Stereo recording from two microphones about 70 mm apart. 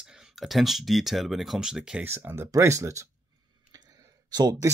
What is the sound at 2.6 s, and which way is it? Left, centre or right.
Speech, right.